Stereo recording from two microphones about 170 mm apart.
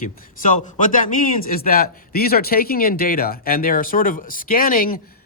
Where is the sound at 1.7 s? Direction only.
60° left (ahead or behind).